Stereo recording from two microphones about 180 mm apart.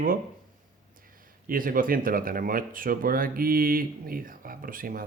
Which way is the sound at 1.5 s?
50° right (ahead or behind).